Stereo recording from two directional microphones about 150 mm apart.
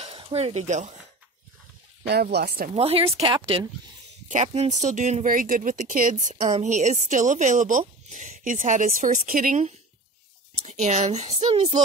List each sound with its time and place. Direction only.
0.0 s speech: 40° right (ahead or behind)
2.3 s speech: 90° right
2.7 s speech: 40° right (ahead or behind)
4.3 s speech: 50° right (ahead or behind)
10.6 s speech: 50° right (ahead or behind)